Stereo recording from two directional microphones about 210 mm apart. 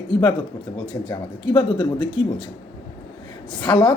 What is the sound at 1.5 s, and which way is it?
Speech, 20° left (ahead or behind).